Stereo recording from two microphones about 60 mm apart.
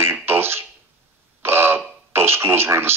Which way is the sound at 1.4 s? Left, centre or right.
Right.